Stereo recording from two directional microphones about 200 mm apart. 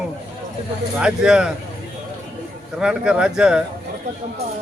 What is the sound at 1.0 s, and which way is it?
Speech, 5° right (ahead or behind).